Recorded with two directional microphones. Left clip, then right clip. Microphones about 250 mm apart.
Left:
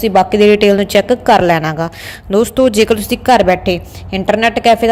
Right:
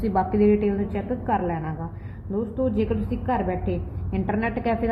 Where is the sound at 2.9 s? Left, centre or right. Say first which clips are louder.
Left 16 dB; left.